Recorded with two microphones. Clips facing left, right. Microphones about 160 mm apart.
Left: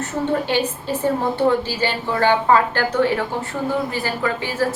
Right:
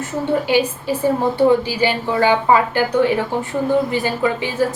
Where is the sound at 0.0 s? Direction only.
10° right (ahead or behind).